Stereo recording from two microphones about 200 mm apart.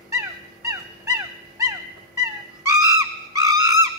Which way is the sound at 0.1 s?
15° right (ahead or behind).